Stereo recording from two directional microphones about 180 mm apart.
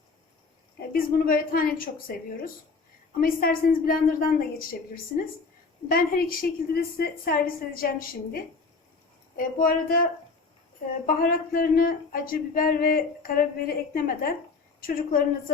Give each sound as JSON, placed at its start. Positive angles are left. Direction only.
{"t": 0.8, "sound": "speech", "side_deg": 55}
{"t": 5.9, "sound": "a woman's voice", "side_deg": 55}
{"t": 9.4, "sound": "a woman's voice", "side_deg": 50}